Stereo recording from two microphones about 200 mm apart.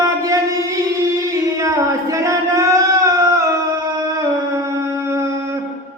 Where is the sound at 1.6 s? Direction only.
15° right (ahead or behind).